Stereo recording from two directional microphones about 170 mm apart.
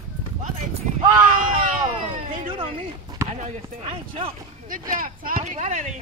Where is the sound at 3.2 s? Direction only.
15° right (ahead or behind).